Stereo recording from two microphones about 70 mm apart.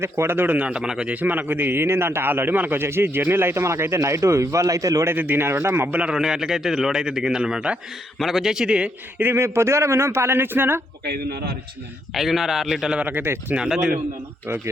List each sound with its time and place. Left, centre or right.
0.0 s a man's voice: right
0.7 s a man's voice: centre; by 5.0 s right
5.0 s a man's voice: right
6.0 s a man's voice: centre
9.3 s a man's voice: right
12.1 s a man's voice: centre
13.0 s speech: right
13.6 s a man's voice: centre
14.4 s a man's voice: right